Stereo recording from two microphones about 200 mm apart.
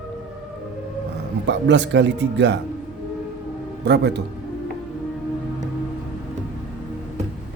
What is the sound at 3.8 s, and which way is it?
Speech, 55° right (ahead or behind).